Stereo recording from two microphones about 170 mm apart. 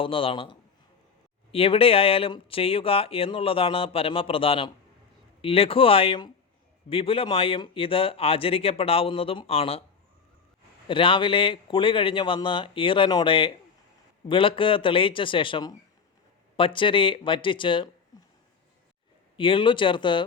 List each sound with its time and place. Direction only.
0.0 s speech: 30° left (ahead or behind)
1.5 s speech: 35° left (ahead or behind)
10.8 s speech: 30° left (ahead or behind)
19.4 s speech: 30° left (ahead or behind)